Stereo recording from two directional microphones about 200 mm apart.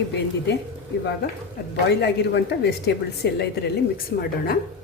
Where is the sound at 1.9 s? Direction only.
55° left (ahead or behind).